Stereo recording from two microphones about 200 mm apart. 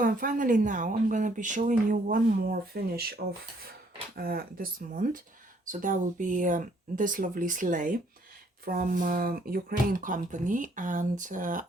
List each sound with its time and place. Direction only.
0.0 s speech: 45° right (ahead or behind)
4.2 s speech: 45° right (ahead or behind)